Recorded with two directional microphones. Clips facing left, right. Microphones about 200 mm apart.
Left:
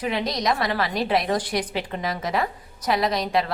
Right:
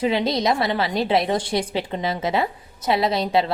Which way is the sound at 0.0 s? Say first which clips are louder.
Right 5 dB; 30° right (ahead or behind).